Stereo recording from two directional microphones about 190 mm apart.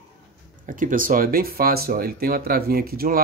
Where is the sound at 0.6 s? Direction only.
45° right (ahead or behind).